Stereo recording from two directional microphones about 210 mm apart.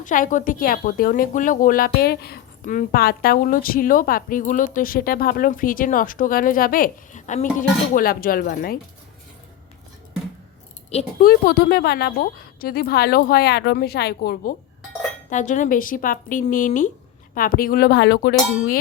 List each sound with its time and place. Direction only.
0.0 s a woman's voice: 40° left (ahead or behind)
10.9 s a woman's voice: 45° left (ahead or behind)
15.3 s a woman's voice: 35° left (ahead or behind)